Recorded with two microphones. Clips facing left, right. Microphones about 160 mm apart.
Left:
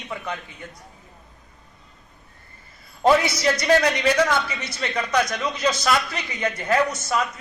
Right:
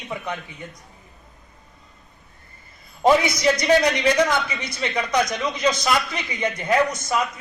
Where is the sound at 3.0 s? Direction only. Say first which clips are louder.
Right 1 dB; 15° right (ahead or behind).